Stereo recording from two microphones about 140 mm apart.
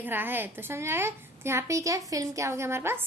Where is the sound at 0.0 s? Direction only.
15° right (ahead or behind).